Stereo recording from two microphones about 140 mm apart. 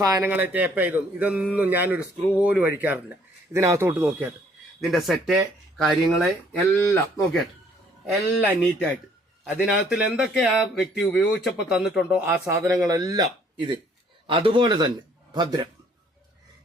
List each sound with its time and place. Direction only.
0.0 s speech: 25° right (ahead or behind)
0.3 s speech: 10° right (ahead or behind)
4.8 s speech: centre (ahead or behind)
8.0 s speech: 10° right (ahead or behind)
9.9 s speech: 5° right (ahead or behind); by 15.7 s 30° right (ahead or behind)